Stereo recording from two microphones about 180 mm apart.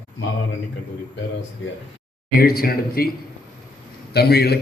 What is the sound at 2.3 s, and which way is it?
Speech, 55° left (ahead or behind).